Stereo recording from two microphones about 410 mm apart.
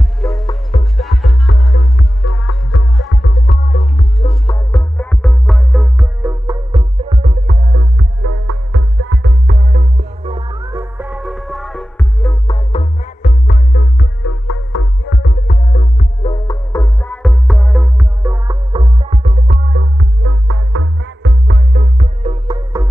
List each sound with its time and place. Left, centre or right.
0.2 s music: centre